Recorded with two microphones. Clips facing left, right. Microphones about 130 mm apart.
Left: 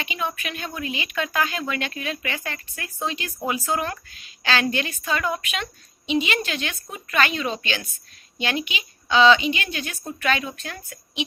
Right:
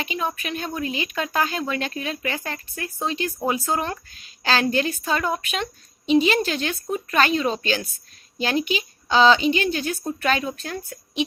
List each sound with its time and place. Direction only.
0.0 s speech: 35° right (ahead or behind)